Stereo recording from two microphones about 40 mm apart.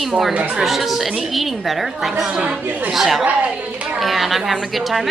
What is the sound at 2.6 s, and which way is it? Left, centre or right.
Speech, right.